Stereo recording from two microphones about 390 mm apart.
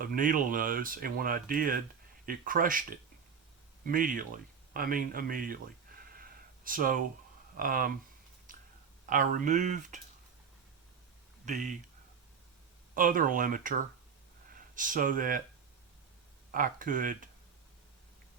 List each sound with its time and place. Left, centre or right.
0.0 s speech: right
6.7 s speech: right
9.0 s speech: centre
11.4 s speech: centre
12.9 s speech: right
16.5 s speech: right